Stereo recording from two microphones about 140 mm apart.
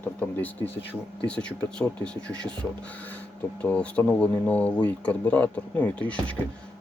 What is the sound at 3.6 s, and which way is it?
Speech, 10° left (ahead or behind).